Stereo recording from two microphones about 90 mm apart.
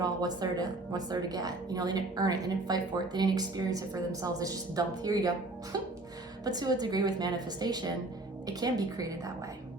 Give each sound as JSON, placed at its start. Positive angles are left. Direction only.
{"t": 0.0, "sound": "a woman's voice", "side_deg": -50}